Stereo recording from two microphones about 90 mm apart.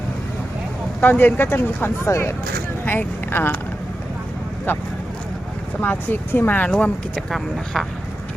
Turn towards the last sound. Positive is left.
turn(degrees=0)  # may be behind; listen again after turning